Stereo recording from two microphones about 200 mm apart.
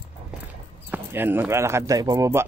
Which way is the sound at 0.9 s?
10° right (ahead or behind).